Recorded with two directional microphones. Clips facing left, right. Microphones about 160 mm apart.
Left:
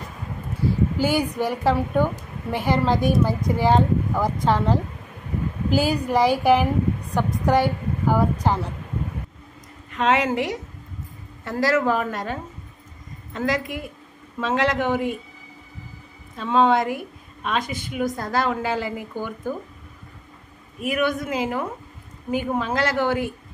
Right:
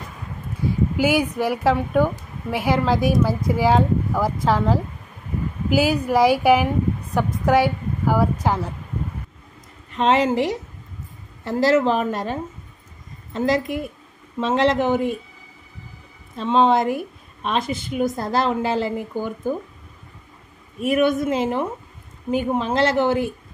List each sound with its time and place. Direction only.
0.9 s a woman's voice: 10° right (ahead or behind)
9.9 s a woman's voice: 25° right (ahead or behind)
16.3 s a woman's voice: 20° right (ahead or behind)
20.8 s a woman's voice: 25° right (ahead or behind)